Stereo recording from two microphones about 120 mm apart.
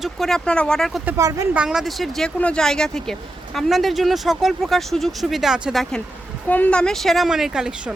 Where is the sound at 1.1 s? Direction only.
25° right (ahead or behind).